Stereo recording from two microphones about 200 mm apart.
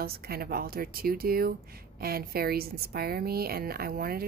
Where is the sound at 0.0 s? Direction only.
50° right (ahead or behind).